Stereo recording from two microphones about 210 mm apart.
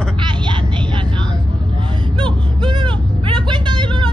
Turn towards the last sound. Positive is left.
turn(degrees=-20)  # may be behind; listen again after turning